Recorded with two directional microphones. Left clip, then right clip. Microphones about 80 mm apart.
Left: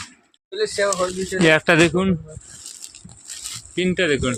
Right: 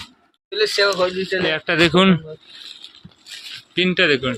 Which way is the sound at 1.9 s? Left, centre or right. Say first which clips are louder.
Right 7 dB; right.